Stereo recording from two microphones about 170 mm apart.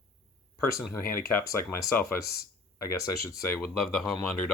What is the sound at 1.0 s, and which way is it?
Speech, 55° left (ahead or behind).